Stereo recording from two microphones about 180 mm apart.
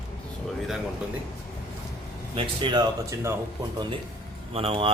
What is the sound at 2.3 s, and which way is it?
Speech, 30° right (ahead or behind).